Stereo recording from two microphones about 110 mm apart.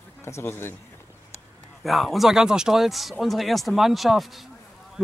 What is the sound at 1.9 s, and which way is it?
Speech, centre (ahead or behind).